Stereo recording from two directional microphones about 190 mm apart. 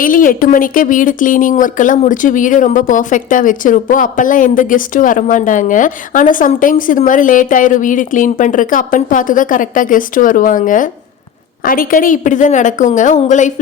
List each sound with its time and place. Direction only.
0.0 s a woman's voice: 45° left (ahead or behind)